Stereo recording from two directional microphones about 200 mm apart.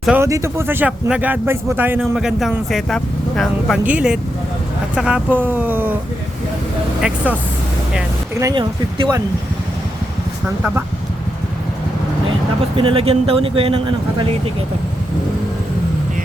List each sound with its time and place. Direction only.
0.0 s speech: 10° right (ahead or behind)
8.4 s speech: 20° right (ahead or behind)
12.7 s speech: 25° right (ahead or behind)